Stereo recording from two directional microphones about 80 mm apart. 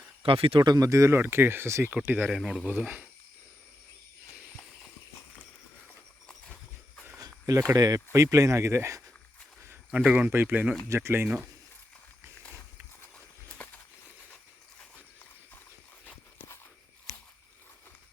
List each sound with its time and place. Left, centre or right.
0.2 s speech: right
0.9 s speech: right
2.0 s speech: right
2.3 s speech: centre
2.6 s speech: centre
6.2 s horse: centre
7.7 s speech: right
9.9 s speech: centre
10.8 s speech: right
13.1 s a sound: centre